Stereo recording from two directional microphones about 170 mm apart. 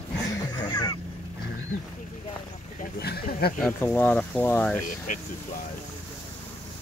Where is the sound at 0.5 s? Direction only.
30° left (ahead or behind).